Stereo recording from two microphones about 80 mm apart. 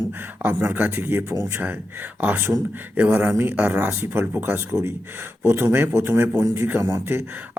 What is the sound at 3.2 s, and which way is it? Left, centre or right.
Speech, right.